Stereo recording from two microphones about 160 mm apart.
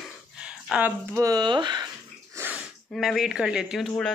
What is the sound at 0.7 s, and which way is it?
Speech, 15° right (ahead or behind).